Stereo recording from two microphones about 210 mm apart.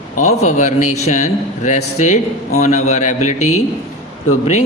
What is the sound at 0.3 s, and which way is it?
Speech, 35° left (ahead or behind).